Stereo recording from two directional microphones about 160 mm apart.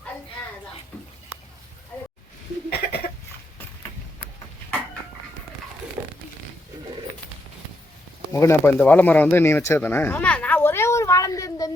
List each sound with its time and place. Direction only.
2.6 s cough: 70° left (ahead or behind)
8.3 s speech: 20° left (ahead or behind)